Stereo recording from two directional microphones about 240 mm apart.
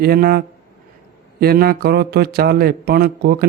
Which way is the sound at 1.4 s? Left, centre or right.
Right.